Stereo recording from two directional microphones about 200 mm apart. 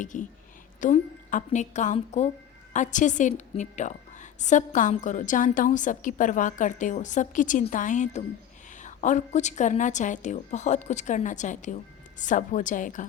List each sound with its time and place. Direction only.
0.0 s a woman's voice: 40° left (ahead or behind)